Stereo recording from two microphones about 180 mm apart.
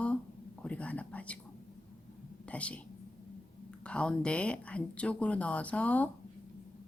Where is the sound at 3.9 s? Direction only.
5° left (ahead or behind).